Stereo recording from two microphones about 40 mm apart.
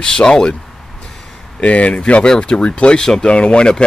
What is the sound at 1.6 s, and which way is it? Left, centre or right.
Speech, left.